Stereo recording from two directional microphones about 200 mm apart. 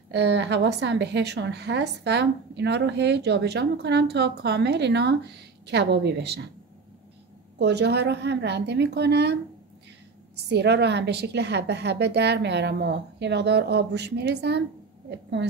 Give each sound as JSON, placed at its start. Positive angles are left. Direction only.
{"t": 0.1, "sound": "a woman's voice", "side_deg": -60}
{"t": 7.5, "sound": "a woman's voice", "side_deg": -55}
{"t": 10.5, "sound": "a woman's voice", "side_deg": -55}